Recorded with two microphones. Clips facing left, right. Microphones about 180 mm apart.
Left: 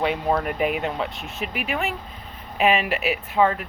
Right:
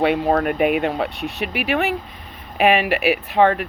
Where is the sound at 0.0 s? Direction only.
60° right (ahead or behind).